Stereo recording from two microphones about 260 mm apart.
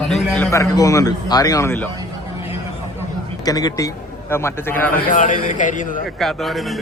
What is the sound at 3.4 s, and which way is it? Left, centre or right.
A man's voice, centre.